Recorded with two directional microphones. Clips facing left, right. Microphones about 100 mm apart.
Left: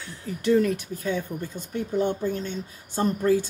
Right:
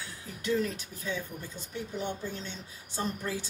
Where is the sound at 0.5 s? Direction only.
60° left (ahead or behind).